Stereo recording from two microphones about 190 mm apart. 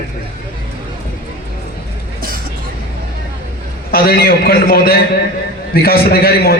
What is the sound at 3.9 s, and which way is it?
A man's voice, 50° left (ahead or behind).